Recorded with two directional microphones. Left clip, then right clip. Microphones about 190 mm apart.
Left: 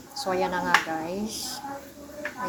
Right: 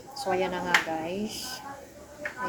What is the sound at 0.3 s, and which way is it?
Speech, 5° right (ahead or behind).